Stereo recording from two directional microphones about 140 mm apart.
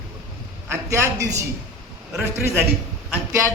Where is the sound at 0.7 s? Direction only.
20° right (ahead or behind).